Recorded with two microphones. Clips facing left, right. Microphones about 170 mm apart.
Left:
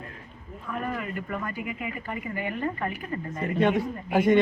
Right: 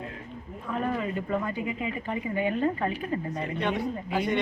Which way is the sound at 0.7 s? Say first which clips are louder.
Right 3 dB; 20° right (ahead or behind).